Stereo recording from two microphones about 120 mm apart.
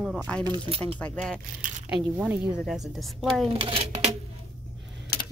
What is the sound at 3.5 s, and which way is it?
Speech, 50° right (ahead or behind).